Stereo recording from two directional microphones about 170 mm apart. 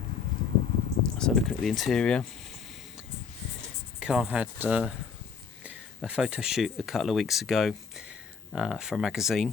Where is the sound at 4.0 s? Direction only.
5° right (ahead or behind).